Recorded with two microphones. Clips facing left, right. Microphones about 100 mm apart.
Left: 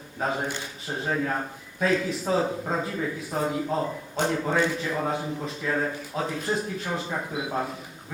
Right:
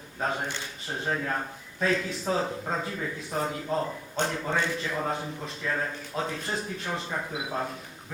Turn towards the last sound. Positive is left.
turn(degrees=5)  # may be behind; listen again after turning